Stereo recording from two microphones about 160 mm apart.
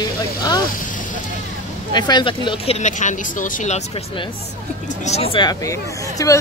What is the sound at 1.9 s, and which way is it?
Speech, 25° left (ahead or behind).